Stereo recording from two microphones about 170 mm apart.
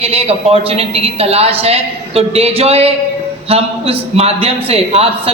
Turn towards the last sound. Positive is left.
turn(degrees=-35)  # may be behind; listen again after turning